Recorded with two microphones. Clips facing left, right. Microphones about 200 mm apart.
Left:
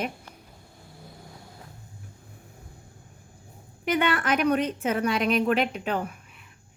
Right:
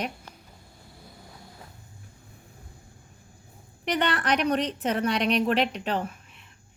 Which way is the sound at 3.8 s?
5° left (ahead or behind).